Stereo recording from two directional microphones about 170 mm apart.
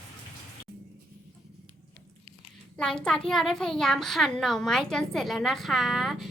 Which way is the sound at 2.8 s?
5° left (ahead or behind).